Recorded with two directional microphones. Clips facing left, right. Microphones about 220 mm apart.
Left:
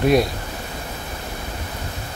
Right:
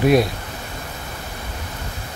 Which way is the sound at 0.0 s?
Centre (ahead or behind).